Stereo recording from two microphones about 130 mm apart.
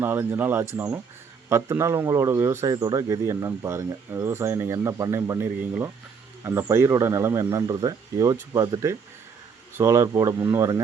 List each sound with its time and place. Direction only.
0.0 s a man's voice: 15° right (ahead or behind)